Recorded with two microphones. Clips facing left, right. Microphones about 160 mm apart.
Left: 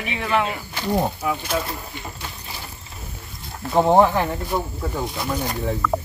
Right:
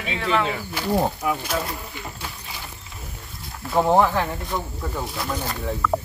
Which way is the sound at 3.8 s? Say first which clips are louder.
Left 3 dB; 20° left (ahead or behind).